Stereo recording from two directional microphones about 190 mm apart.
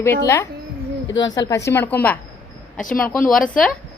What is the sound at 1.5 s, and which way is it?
Speech, 15° left (ahead or behind).